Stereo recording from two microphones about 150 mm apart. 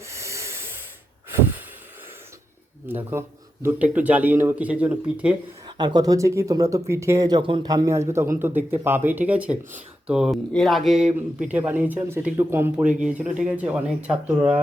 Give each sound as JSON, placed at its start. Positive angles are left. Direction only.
{"t": 0.0, "sound": "a sound", "side_deg": -20}
{"t": 2.8, "sound": "speech", "side_deg": -15}
{"t": 5.6, "sound": "speech", "side_deg": -30}